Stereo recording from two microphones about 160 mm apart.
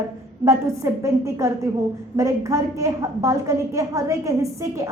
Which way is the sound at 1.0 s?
20° right (ahead or behind).